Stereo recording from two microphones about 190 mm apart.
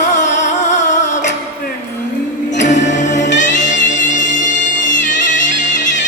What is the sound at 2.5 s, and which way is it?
Music, 40° left (ahead or behind).